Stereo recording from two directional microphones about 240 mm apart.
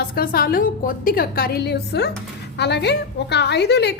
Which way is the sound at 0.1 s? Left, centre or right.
Left.